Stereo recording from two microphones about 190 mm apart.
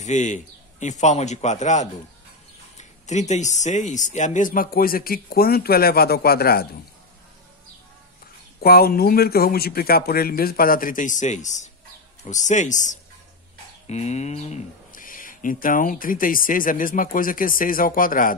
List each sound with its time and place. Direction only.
0.0 s a man's voice: 40° left (ahead or behind); by 6.7 s 55° left (ahead or behind)
8.5 s a man's voice: 55° left (ahead or behind)